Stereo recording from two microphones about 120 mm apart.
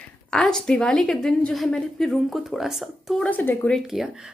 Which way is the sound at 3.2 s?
15° left (ahead or behind).